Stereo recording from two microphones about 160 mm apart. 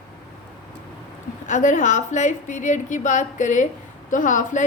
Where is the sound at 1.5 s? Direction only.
50° left (ahead or behind).